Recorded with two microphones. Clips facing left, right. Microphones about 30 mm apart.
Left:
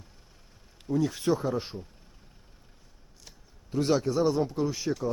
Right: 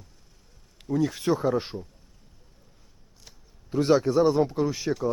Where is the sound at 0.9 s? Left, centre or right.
Centre.